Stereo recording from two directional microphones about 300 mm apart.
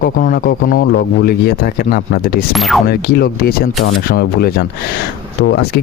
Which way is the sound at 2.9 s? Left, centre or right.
Left.